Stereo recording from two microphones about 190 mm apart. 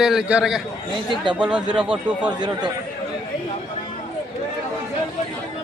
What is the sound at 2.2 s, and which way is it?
Speech, 25° right (ahead or behind).